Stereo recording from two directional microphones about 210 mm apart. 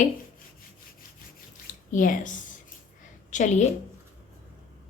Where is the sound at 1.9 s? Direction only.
40° left (ahead or behind).